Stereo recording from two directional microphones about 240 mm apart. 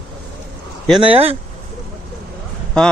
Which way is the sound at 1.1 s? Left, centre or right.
Right.